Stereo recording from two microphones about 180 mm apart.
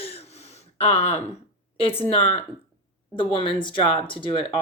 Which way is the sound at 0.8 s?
35° left (ahead or behind).